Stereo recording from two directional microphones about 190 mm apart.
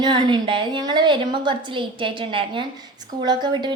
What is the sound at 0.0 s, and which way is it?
A woman's voice, 25° right (ahead or behind).